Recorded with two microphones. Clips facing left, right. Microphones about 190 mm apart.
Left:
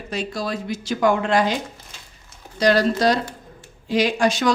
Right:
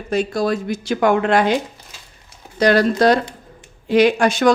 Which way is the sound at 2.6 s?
55° right (ahead or behind).